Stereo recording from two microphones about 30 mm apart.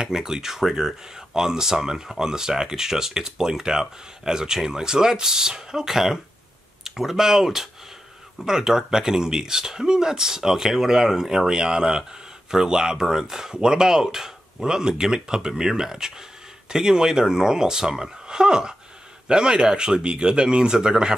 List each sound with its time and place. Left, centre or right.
0.0 s speech: centre
13.0 s speech: centre